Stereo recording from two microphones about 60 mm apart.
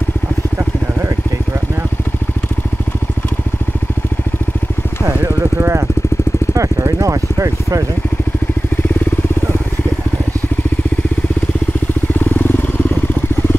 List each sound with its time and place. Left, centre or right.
5.0 s vehicle: right
6.9 s a sound: right
12.2 s vehicle: left